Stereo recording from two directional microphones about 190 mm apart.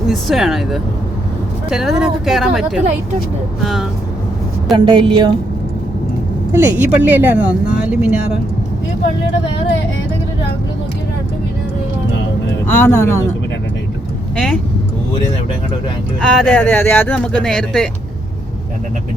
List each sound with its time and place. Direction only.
0.1 s speech: centre (ahead or behind)
4.9 s a woman's voice: 25° right (ahead or behind)
6.5 s speech: 10° right (ahead or behind)
12.6 s speech: 10° left (ahead or behind)
14.3 s speech: 5° left (ahead or behind)
16.2 s speech: 5° left (ahead or behind)